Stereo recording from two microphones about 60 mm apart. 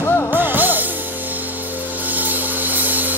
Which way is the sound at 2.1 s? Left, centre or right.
Right.